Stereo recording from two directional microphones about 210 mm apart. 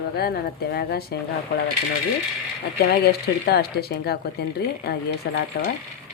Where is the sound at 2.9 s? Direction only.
50° left (ahead or behind).